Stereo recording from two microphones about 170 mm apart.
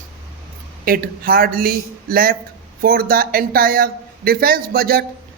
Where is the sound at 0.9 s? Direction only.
60° right (ahead or behind).